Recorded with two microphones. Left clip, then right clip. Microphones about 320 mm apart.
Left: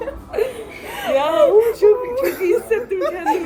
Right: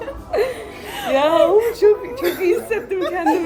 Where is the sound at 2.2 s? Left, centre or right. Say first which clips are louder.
Left 1 dB; centre.